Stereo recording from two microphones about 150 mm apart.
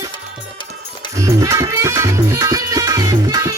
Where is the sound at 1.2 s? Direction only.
20° right (ahead or behind).